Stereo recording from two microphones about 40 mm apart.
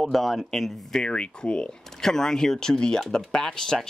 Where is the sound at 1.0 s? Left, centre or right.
Left.